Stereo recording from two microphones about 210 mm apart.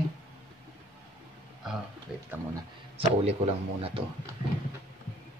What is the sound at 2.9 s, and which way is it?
Speech, 30° right (ahead or behind).